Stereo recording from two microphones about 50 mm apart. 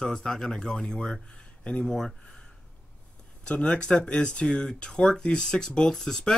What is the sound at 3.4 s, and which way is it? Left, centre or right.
Speech, left.